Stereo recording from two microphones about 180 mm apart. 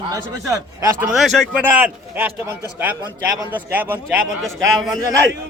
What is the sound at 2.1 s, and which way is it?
A man's voice, 10° right (ahead or behind).